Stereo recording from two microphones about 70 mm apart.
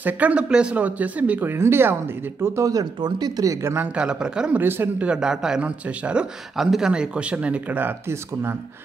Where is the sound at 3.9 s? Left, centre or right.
Centre.